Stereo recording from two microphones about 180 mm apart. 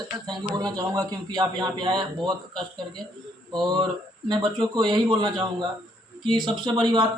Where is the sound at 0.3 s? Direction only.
25° right (ahead or behind).